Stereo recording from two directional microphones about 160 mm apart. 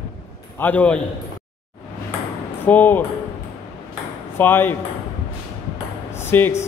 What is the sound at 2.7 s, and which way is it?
Speech, 10° left (ahead or behind).